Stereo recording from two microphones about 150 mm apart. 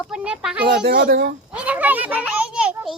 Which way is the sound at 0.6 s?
85° right.